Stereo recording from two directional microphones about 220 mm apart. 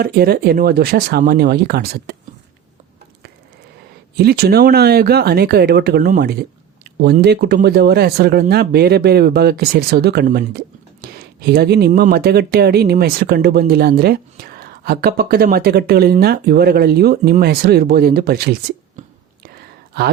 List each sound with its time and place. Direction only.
0.0 s speech: 45° right (ahead or behind)
4.1 s speech: 45° right (ahead or behind)